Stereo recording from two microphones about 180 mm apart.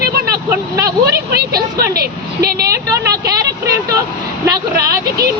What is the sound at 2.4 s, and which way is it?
Speech, 20° right (ahead or behind).